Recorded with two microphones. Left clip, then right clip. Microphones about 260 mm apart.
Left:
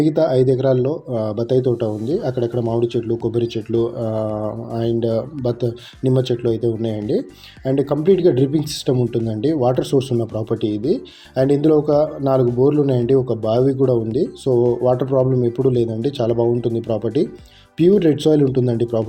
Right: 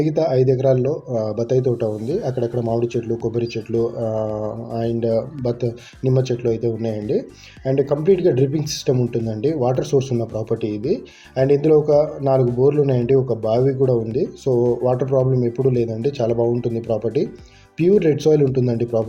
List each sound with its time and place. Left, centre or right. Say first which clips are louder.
0.0 s speech: left 2 dB; centre